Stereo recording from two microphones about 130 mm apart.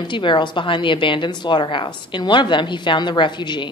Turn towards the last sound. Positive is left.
turn(degrees=35)  # may be behind; listen again after turning